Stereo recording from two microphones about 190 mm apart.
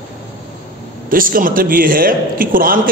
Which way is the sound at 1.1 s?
45° right (ahead or behind).